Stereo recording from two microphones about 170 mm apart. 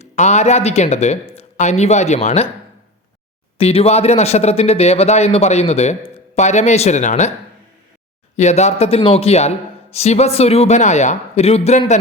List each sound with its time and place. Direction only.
0.0 s a man's voice: 45° left (ahead or behind)
3.6 s a man's voice: 35° left (ahead or behind)
8.4 s a man's voice: 40° left (ahead or behind)